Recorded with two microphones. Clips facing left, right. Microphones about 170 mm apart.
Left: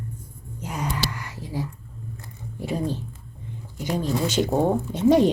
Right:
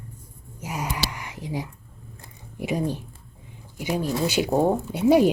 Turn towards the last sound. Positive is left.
turn(degrees=-10)  # may be behind; listen again after turning